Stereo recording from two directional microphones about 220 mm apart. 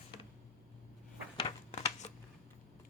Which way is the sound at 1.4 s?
30° left (ahead or behind).